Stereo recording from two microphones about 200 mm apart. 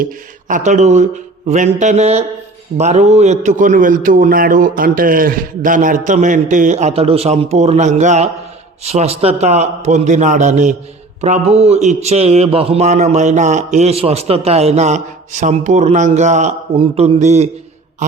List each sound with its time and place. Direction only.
0.0 s a man's voice: 40° right (ahead or behind)